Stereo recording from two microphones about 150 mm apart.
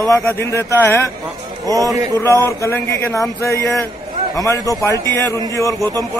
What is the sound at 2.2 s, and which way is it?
Speech, 20° left (ahead or behind).